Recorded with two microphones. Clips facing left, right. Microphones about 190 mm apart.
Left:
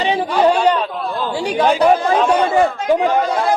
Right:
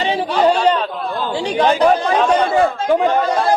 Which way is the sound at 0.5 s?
5° left (ahead or behind).